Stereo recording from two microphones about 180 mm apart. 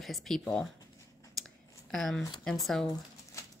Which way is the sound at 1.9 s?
Centre (ahead or behind).